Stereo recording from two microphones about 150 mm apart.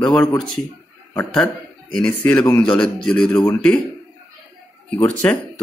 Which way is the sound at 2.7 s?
5° left (ahead or behind).